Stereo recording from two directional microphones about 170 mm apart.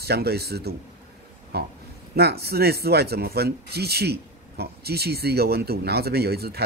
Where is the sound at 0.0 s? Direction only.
70° right (ahead or behind).